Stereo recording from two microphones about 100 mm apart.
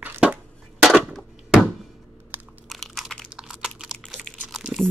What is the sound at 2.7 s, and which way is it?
Crunch, centre (ahead or behind).